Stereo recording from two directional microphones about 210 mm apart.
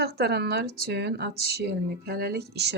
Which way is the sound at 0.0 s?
50° right (ahead or behind).